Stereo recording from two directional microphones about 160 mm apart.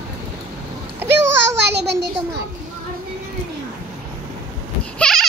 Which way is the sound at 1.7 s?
90° right.